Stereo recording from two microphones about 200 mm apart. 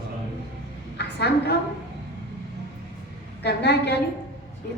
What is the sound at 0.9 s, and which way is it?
Speech, 55° left (ahead or behind).